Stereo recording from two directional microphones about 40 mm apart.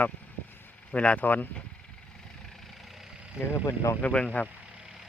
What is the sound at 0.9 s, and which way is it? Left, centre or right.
Speech, left.